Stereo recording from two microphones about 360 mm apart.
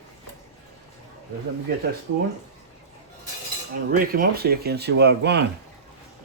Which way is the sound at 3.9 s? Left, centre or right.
Right.